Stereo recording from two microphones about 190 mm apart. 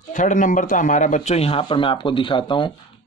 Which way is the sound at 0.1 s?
45° left (ahead or behind).